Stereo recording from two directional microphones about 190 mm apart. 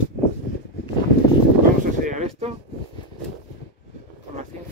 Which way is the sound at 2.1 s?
35° right (ahead or behind).